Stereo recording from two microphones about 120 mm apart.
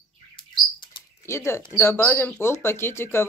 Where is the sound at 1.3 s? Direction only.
20° left (ahead or behind).